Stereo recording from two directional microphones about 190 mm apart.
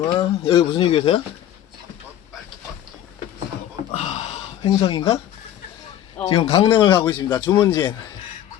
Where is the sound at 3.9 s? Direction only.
35° left (ahead or behind).